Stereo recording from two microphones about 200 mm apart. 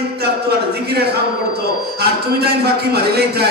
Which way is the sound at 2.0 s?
50° right (ahead or behind).